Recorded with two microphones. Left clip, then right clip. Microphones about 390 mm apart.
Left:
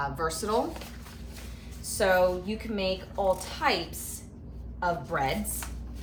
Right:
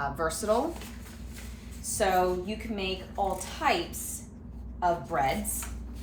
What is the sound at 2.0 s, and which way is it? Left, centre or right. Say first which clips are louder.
Speech: left 2 dB; centre.